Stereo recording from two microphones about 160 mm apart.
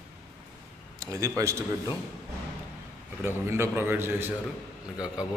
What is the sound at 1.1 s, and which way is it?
Speech, 20° right (ahead or behind).